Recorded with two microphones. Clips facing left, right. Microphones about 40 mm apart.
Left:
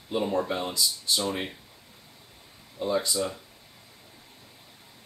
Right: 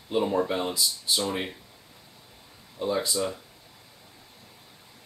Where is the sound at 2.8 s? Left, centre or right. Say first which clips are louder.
Even; centre.